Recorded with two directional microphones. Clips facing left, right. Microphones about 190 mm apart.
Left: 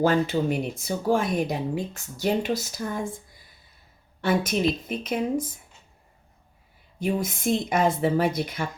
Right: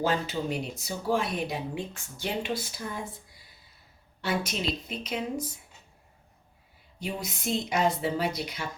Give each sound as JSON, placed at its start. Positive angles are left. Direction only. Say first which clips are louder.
{"t": 0.0, "sound": "speech", "louder": "left 7 dB", "side_deg": 55}
{"t": 4.2, "sound": "speech", "louder": "left 7 dB", "side_deg": 50}
{"t": 7.0, "sound": "speech", "louder": "left 8 dB", "side_deg": 50}